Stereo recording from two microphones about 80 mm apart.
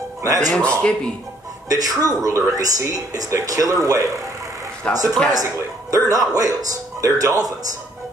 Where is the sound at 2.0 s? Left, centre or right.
Right.